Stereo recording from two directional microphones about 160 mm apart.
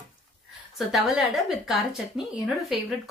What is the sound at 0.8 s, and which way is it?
A woman's voice, centre (ahead or behind).